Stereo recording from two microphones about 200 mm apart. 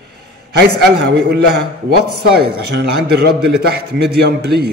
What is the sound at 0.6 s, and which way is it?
Speech, 55° right (ahead or behind).